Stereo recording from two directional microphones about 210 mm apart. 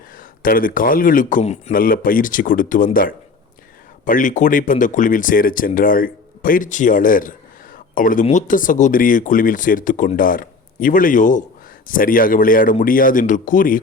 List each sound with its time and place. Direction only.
0.2 s speech: 40° left (ahead or behind)